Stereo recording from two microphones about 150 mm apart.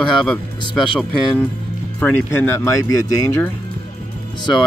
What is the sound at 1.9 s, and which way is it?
Speech, 10° left (ahead or behind).